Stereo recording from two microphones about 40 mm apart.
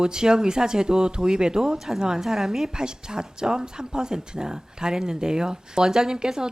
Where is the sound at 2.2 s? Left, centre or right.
Centre.